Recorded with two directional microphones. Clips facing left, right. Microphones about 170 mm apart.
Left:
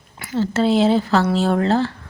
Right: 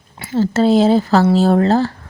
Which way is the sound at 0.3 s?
40° right (ahead or behind).